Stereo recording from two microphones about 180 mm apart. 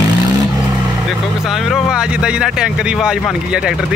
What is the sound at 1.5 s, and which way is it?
Speech, centre (ahead or behind).